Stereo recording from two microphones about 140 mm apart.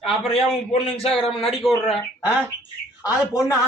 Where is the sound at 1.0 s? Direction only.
45° left (ahead or behind).